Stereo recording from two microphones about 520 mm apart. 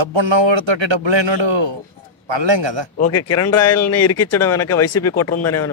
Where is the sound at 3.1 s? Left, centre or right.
Left.